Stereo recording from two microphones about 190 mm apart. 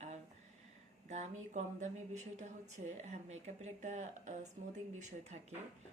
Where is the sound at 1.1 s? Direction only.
35° right (ahead or behind).